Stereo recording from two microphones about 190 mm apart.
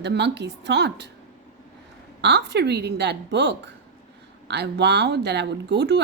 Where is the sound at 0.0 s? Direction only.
65° right (ahead or behind).